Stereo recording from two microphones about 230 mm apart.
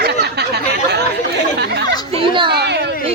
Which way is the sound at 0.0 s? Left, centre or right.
Right.